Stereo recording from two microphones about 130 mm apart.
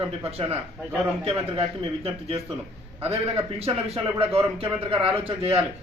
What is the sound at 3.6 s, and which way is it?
A man's voice, 50° right (ahead or behind).